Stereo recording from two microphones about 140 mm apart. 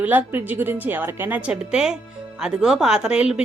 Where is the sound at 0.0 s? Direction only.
10° right (ahead or behind).